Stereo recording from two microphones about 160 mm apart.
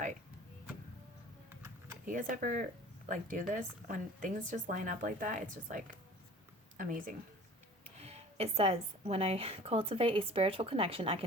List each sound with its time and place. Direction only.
2.0 s a woman's voice: 55° right (ahead or behind)
8.0 s a woman's voice: 40° right (ahead or behind)